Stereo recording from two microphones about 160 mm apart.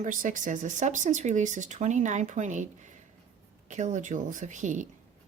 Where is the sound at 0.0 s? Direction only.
55° right (ahead or behind).